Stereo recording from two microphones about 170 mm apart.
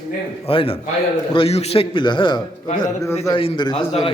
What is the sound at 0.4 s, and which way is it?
A man's voice, 35° left (ahead or behind).